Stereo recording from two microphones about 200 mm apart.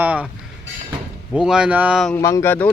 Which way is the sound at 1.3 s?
5° right (ahead or behind).